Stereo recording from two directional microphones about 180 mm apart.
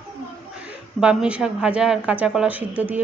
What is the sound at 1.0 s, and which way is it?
Speech, 5° right (ahead or behind).